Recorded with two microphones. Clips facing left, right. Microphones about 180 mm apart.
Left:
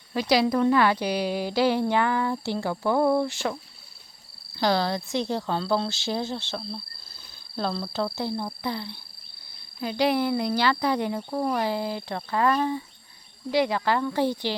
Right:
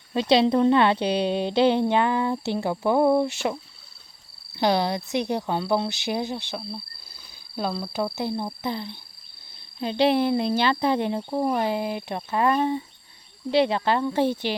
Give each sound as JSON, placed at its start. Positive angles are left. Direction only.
{"t": 0.1, "sound": "a woman's voice", "side_deg": -25}
{"t": 6.6, "sound": "speech", "side_deg": -5}
{"t": 8.1, "sound": "a woman's voice", "side_deg": -20}